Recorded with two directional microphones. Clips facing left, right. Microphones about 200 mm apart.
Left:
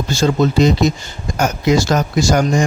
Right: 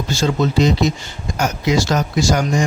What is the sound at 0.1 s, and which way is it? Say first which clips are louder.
Speech: left 3 dB; 50° left (ahead or behind).